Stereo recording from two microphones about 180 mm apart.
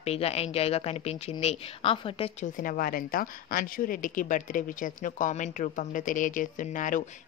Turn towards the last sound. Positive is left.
turn(degrees=45)  # may be behind; listen again after turning